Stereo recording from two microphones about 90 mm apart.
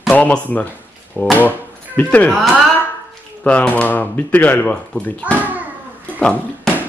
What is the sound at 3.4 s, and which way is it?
A man's voice, 15° left (ahead or behind).